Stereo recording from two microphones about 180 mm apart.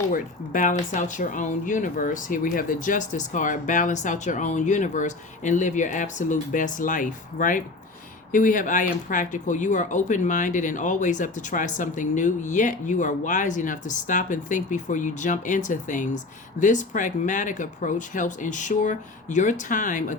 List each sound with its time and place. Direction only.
0.1 s speech: 50° left (ahead or behind)